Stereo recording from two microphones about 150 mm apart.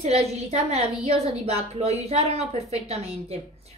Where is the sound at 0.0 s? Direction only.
45° right (ahead or behind).